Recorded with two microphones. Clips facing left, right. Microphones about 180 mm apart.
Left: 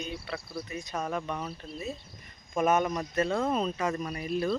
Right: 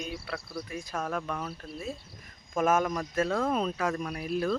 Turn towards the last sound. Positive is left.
turn(degrees=0)  # may be behind; listen again after turning